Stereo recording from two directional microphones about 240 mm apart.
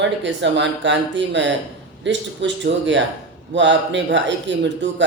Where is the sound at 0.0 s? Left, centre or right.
Right.